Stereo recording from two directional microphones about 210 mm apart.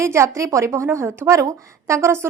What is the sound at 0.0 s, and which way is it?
A woman's voice, 15° right (ahead or behind).